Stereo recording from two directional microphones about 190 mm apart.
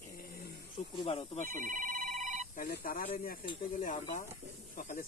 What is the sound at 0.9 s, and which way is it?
Speech, 25° left (ahead or behind).